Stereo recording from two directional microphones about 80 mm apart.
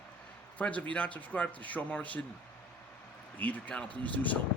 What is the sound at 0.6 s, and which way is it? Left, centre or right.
Speech, centre.